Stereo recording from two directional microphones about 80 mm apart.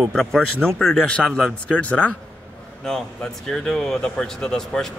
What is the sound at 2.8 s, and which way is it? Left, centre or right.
Speech, centre.